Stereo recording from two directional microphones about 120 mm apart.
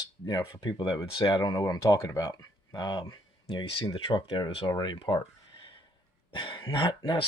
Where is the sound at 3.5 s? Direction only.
50° left (ahead or behind).